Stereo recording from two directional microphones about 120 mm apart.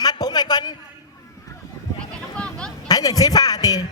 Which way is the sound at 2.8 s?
30° left (ahead or behind).